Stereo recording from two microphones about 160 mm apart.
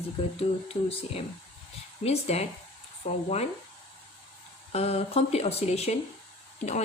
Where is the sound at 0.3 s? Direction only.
35° left (ahead or behind).